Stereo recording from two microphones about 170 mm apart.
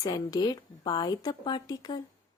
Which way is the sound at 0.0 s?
25° left (ahead or behind).